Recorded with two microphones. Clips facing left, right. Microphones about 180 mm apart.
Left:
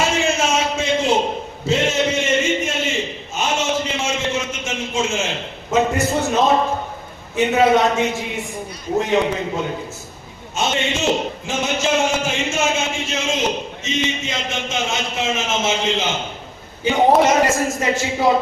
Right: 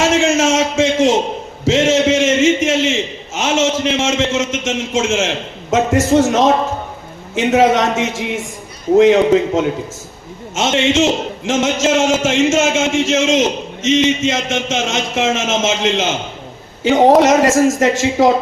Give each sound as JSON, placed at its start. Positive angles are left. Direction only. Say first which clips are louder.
{"t": 0.0, "sound": "a sound", "louder": "right 6 dB", "side_deg": -85}
{"t": 5.7, "sound": "a man's voice", "louder": "right 6 dB", "side_deg": -90}
{"t": 17.2, "sound": "speech", "louder": "right 5 dB", "side_deg": -90}